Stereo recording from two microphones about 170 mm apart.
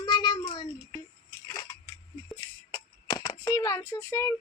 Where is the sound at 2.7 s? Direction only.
25° left (ahead or behind).